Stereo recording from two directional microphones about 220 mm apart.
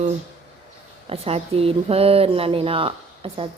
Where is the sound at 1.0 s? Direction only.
25° right (ahead or behind).